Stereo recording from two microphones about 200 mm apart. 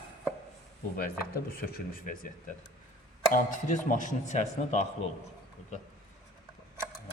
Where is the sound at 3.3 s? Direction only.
40° left (ahead or behind).